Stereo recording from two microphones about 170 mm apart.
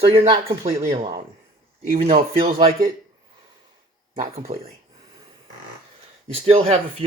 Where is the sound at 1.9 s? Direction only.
50° right (ahead or behind).